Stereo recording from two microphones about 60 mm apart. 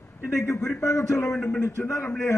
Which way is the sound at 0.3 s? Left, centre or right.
Left.